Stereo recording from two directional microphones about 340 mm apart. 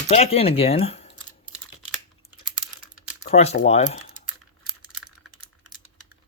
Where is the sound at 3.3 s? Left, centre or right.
Left.